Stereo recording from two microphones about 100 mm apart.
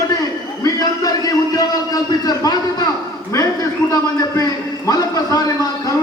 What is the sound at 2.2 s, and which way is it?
Speech, 40° left (ahead or behind).